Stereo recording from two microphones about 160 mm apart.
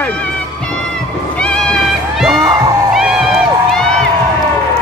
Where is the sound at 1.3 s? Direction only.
5° left (ahead or behind).